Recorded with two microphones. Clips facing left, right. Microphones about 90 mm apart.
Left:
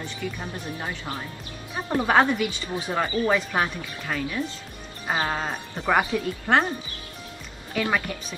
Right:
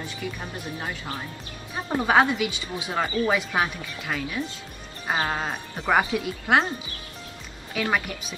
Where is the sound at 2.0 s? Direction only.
5° right (ahead or behind).